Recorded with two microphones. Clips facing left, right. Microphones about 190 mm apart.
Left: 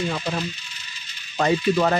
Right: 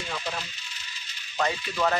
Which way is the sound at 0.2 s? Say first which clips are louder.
Left 7 dB; 50° left (ahead or behind).